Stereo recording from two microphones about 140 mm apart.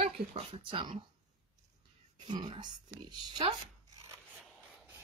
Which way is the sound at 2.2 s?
30° right (ahead or behind).